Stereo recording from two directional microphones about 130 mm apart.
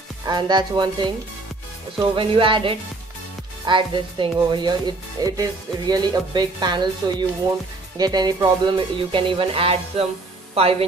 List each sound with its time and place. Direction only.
0.2 s speech: 35° right (ahead or behind); by 10.9 s 50° right (ahead or behind)